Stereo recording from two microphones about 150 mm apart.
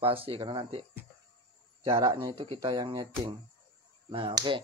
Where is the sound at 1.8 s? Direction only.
30° right (ahead or behind).